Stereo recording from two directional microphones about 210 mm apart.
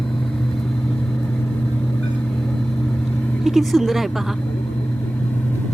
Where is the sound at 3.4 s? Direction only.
Centre (ahead or behind).